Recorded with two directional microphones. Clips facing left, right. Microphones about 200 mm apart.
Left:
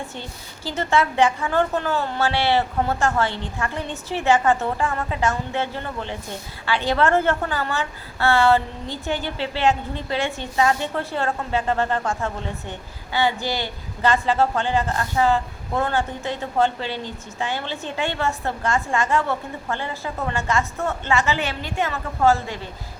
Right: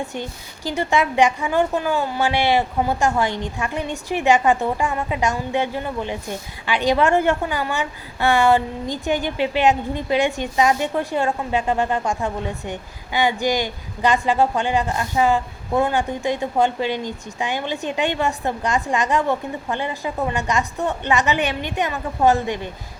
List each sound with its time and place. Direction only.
0.0 s a woman's voice: 15° right (ahead or behind)